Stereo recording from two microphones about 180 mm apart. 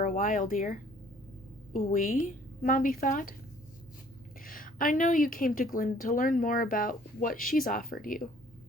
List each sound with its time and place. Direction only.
0.0 s a woman's voice: 45° left (ahead or behind)
4.4 s a woman's voice: 50° left (ahead or behind)